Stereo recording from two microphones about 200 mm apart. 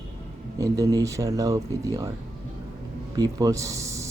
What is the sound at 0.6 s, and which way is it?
Speech, 15° right (ahead or behind).